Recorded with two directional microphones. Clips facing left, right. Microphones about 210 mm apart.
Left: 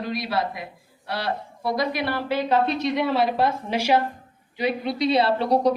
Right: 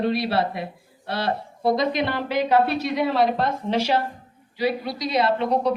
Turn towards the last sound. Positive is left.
turn(degrees=35)  # may be behind; listen again after turning